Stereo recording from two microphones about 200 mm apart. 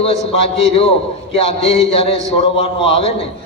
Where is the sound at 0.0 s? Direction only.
30° left (ahead or behind).